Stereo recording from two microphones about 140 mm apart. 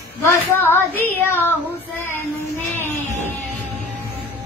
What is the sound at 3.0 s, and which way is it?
Music, 60° right (ahead or behind).